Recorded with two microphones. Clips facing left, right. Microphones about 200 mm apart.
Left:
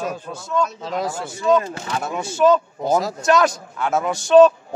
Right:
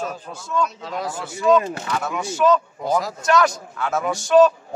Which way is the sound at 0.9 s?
25° left (ahead or behind).